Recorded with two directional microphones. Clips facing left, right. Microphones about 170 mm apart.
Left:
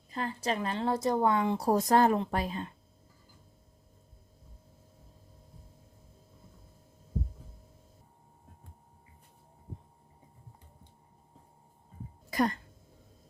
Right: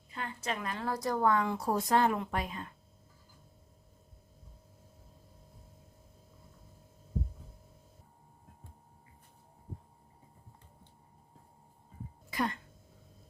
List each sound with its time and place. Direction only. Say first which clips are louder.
0.1 s a woman's voice: left 5 dB; 35° left (ahead or behind)
1.5 s speech: left 4 dB; 40° left (ahead or behind)
12.3 s a sound: left 5 dB; 40° left (ahead or behind)